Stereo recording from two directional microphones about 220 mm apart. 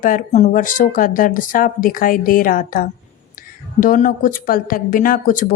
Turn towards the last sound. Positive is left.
turn(degrees=40)  # may be behind; listen again after turning